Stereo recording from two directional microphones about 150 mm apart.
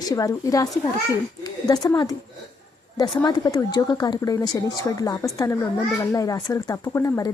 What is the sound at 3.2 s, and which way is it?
Speech, 25° left (ahead or behind).